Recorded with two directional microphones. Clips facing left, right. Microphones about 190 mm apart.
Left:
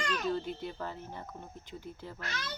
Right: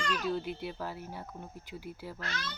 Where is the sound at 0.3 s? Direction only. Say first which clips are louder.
Even; 5° right (ahead or behind).